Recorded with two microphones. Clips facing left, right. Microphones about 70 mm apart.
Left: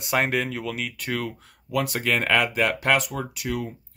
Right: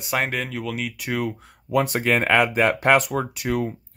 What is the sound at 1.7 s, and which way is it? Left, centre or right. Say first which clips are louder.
Speech: right 4 dB; right.